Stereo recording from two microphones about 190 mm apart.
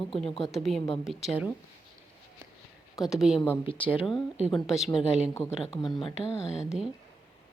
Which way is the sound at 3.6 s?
25° left (ahead or behind).